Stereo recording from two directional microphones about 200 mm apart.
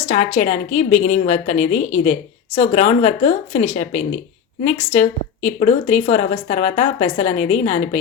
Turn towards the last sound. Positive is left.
turn(degrees=30)  # may be behind; listen again after turning